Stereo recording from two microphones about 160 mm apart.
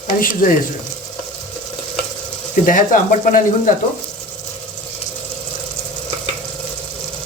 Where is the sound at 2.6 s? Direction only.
55° left (ahead or behind).